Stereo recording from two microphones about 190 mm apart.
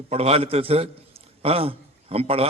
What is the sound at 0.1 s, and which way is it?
A man's voice, 35° right (ahead or behind).